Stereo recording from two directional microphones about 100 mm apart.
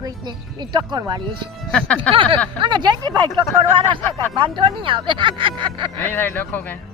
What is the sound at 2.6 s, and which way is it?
Speech, 50° right (ahead or behind).